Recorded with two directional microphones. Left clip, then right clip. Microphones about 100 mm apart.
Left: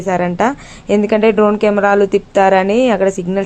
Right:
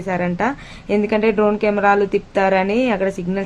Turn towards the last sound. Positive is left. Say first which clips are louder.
# left 6 dB
turn(degrees=40)  # may be behind; listen again after turning